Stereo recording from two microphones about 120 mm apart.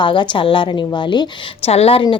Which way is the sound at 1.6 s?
55° left (ahead or behind).